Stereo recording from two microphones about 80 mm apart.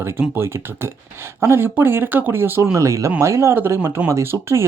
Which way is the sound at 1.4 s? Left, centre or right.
Right.